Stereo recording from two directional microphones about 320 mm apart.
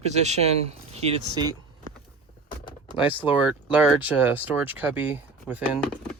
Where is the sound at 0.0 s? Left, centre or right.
Right.